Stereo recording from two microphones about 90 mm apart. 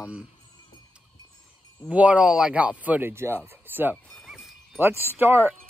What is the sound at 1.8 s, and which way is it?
Speech, 15° right (ahead or behind).